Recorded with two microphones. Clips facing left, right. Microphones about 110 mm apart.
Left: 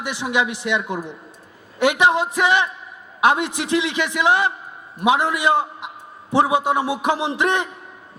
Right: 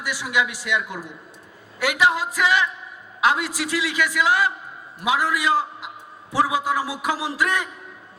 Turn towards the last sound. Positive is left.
turn(degrees=25)  # may be behind; listen again after turning